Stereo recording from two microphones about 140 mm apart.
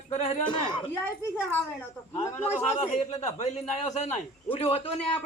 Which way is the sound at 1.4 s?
10° left (ahead or behind).